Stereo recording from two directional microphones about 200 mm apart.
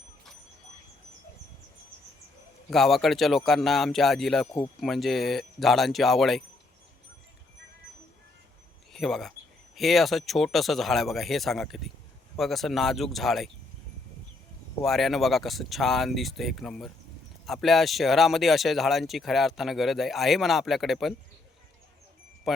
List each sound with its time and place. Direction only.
2.6 s speech: centre (ahead or behind)
8.9 s speech: centre (ahead or behind)
14.8 s speech: centre (ahead or behind)
22.5 s wind chime: centre (ahead or behind)